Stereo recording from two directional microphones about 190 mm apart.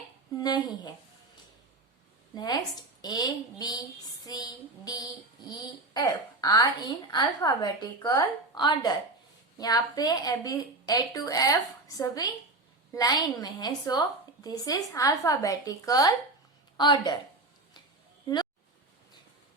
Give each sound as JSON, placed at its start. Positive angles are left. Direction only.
{"t": 0.3, "sound": "speech", "side_deg": 20}
{"t": 2.3, "sound": "a woman's voice", "side_deg": 20}